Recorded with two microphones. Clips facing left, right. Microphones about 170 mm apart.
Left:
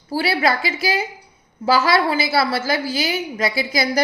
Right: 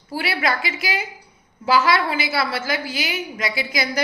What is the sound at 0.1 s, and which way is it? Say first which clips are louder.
A woman's voice: left 4 dB; 35° left (ahead or behind).